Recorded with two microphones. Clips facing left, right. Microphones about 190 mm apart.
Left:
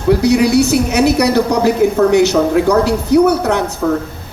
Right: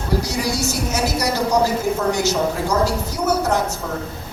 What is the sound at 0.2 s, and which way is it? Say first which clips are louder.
A woman's voice: left 12 dB; 65° left (ahead or behind).